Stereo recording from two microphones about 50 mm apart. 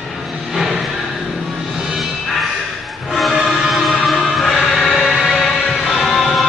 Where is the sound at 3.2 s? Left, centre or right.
Centre.